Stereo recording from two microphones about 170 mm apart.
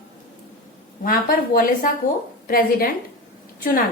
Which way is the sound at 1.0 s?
55° left (ahead or behind).